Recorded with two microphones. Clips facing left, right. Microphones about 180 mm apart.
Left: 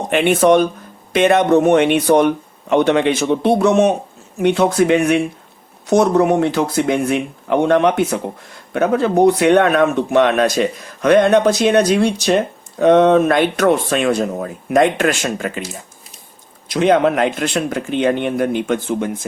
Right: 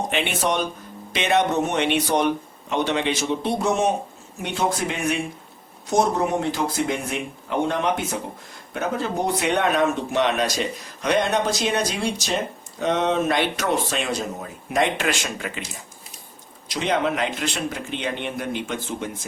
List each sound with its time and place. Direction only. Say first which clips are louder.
0.1 s speech: left 16 dB; 50° left (ahead or behind)
16.6 s speech: left 9 dB; 55° left (ahead or behind)